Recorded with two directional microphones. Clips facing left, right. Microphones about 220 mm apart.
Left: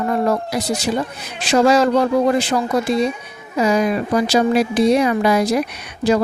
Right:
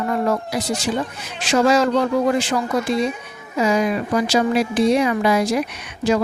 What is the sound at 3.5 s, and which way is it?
Speech, 35° left (ahead or behind).